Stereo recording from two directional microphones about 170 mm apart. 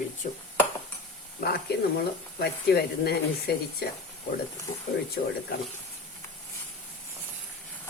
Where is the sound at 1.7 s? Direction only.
70° left (ahead or behind).